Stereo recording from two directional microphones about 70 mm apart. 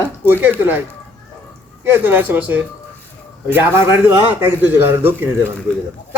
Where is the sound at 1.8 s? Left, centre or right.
Right.